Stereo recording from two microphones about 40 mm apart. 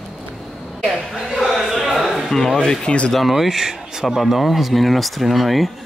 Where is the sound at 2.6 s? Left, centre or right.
Left.